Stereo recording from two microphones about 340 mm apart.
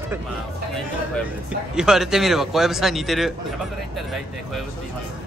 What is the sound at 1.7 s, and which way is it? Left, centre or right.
A man's voice, centre.